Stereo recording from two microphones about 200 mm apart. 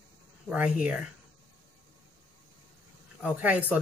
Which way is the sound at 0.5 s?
5° right (ahead or behind).